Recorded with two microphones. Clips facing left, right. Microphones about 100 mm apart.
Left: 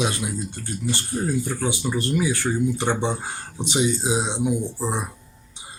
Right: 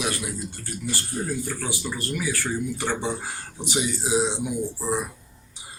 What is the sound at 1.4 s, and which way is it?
Speech, 20° left (ahead or behind).